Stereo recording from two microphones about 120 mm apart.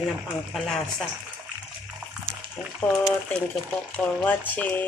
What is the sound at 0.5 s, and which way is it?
Speech, 5° left (ahead or behind).